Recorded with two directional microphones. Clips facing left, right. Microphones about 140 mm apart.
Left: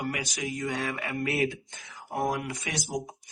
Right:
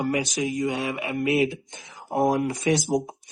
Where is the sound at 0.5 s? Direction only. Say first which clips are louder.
Right 5 dB; 15° right (ahead or behind).